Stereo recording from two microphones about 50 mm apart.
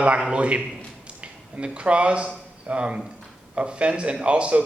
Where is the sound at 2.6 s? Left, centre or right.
Right.